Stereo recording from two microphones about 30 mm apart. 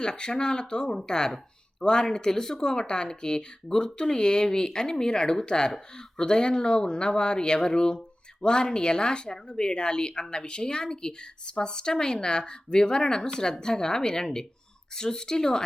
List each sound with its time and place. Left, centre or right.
0.0 s speech: left